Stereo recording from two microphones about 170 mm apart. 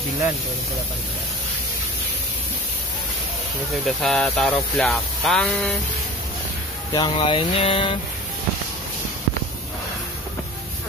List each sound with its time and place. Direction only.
3.8 s speech: centre (ahead or behind)
6.9 s speech: 30° left (ahead or behind)